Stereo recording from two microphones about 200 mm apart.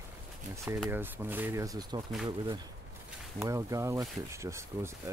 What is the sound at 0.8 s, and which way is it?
Speech, 10° right (ahead or behind).